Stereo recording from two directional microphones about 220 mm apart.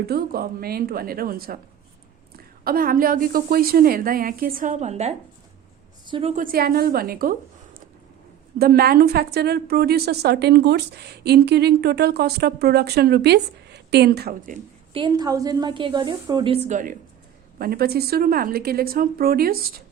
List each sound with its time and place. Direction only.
0.0 s a woman's voice: 45° right (ahead or behind)
14.9 s a woman's voice: 20° right (ahead or behind)
16.6 s a woman's voice: 35° right (ahead or behind)